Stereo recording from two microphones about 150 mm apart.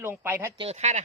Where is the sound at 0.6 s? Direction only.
45° right (ahead or behind).